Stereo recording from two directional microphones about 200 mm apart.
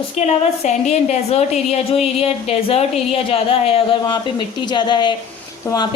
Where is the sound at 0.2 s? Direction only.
35° left (ahead or behind).